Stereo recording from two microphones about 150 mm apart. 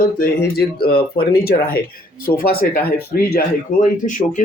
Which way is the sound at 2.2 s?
75° left (ahead or behind).